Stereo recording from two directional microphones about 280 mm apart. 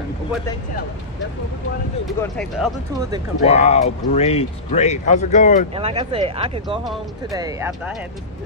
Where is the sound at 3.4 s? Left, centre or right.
Left.